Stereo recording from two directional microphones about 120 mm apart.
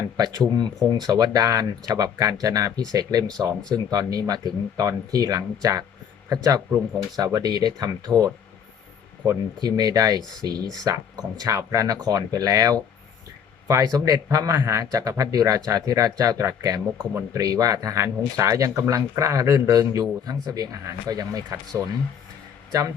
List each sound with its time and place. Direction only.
0.2 s speech: 35° right (ahead or behind)
9.2 s speech: 35° right (ahead or behind)